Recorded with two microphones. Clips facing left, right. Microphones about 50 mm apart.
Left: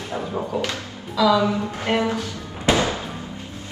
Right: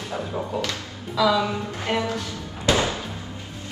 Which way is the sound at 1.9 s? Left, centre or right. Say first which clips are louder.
Left 3 dB; left.